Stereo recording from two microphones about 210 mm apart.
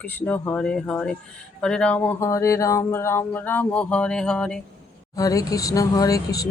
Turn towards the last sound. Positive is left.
turn(degrees=15)  # may be behind; listen again after turning